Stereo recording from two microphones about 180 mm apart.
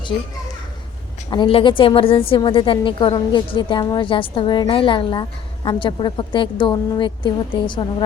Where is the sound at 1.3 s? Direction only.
30° left (ahead or behind).